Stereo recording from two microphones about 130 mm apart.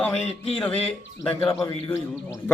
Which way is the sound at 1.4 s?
20° left (ahead or behind).